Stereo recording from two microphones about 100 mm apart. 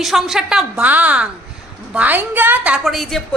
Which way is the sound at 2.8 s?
Centre (ahead or behind).